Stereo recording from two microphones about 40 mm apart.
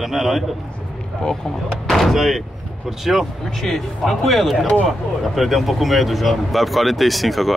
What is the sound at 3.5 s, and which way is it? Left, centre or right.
Speech, centre.